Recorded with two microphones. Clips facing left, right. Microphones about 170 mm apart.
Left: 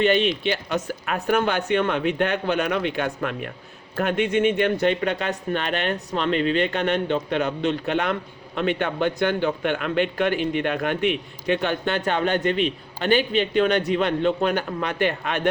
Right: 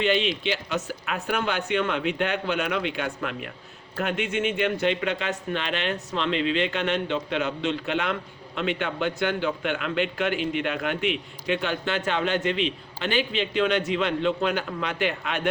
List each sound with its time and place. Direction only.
0.0 s a man's voice: 50° left (ahead or behind)